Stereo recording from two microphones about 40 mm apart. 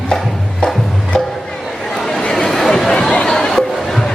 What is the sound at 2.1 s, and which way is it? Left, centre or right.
Chatter, centre.